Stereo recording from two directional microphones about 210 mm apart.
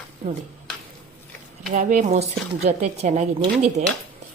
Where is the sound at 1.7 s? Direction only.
40° right (ahead or behind).